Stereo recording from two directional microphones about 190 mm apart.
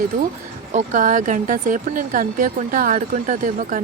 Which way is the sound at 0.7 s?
40° right (ahead or behind).